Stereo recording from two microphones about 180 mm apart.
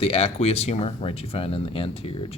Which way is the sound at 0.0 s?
35° left (ahead or behind).